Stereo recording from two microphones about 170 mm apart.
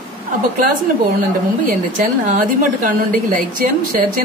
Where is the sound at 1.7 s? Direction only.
50° right (ahead or behind).